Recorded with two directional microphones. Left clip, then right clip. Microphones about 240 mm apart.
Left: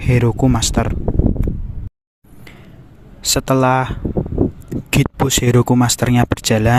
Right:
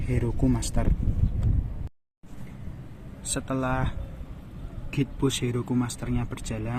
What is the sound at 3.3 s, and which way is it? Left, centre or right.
A man's voice, left.